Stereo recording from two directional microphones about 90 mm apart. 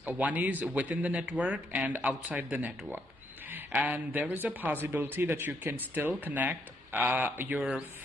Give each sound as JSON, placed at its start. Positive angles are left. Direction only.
{"t": 0.0, "sound": "speech", "side_deg": -15}